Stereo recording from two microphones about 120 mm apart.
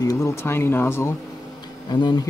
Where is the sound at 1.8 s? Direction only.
35° left (ahead or behind).